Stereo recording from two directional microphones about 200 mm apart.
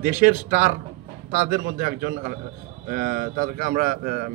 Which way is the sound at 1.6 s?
45° right (ahead or behind).